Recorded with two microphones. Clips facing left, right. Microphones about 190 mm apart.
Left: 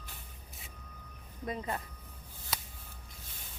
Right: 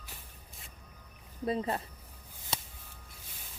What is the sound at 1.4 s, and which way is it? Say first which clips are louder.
Speech: right 5 dB; 30° right (ahead or behind).